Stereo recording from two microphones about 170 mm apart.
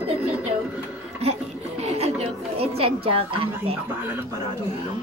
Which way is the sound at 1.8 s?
40° right (ahead or behind).